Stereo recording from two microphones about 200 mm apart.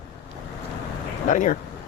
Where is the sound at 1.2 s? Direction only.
40° left (ahead or behind).